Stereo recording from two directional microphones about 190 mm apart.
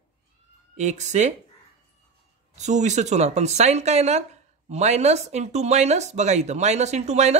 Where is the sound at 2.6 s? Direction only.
40° right (ahead or behind).